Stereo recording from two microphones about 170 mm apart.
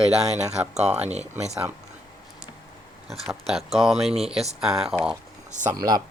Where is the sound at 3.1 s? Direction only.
Centre (ahead or behind).